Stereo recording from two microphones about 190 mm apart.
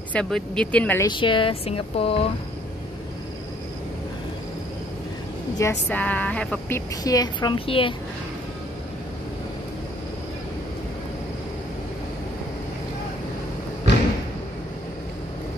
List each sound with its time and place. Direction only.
0.1 s speech: 5° left (ahead or behind)
1.0 s speech: 25° left (ahead or behind)
5.6 s speech: 10° left (ahead or behind)
7.0 s speech: 20° left (ahead or behind)